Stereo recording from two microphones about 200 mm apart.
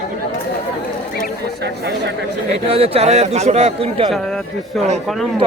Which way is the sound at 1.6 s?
60° right (ahead or behind).